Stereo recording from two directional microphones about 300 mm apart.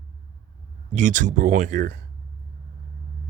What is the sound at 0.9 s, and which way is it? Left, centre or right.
Speech, right.